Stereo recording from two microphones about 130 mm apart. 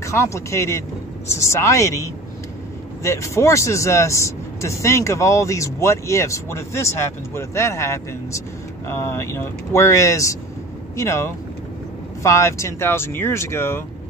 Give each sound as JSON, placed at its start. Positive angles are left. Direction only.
{"t": 0.0, "sound": "speech", "side_deg": 20}